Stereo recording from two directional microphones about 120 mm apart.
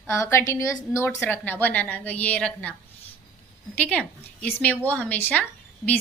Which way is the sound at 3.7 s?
10° left (ahead or behind).